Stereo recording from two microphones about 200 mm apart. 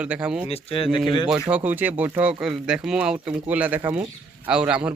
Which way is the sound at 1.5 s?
10° right (ahead or behind).